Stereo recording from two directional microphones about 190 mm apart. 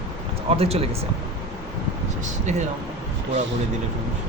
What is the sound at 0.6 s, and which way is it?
Speech, 30° right (ahead or behind).